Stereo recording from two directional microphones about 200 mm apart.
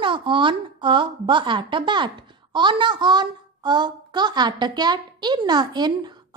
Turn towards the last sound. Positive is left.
turn(degrees=-20)  # may be behind; listen again after turning